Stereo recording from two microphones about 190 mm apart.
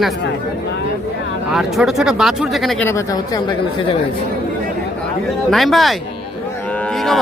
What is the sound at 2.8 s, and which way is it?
Speech, 15° left (ahead or behind).